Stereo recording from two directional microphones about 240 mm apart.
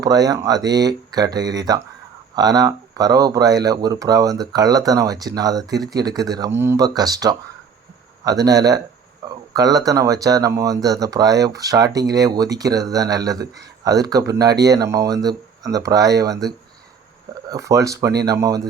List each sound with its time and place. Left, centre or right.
0.0 s speech: centre
17.5 s speech: centre